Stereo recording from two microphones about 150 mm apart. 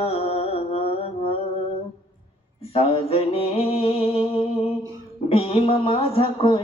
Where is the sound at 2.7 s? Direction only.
40° left (ahead or behind).